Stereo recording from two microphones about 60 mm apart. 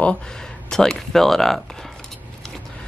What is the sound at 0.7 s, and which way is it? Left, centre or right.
Speech, centre.